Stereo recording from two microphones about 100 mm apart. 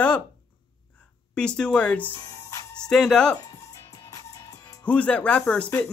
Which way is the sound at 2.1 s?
35° left (ahead or behind).